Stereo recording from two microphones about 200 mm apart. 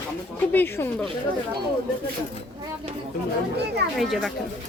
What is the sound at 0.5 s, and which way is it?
Speech, 10° left (ahead or behind).